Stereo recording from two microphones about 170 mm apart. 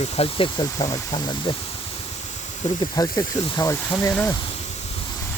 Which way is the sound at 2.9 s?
20° left (ahead or behind).